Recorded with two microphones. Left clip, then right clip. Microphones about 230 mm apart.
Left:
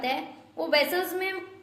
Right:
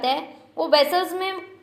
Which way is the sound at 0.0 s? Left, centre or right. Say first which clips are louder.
Right 6 dB; centre.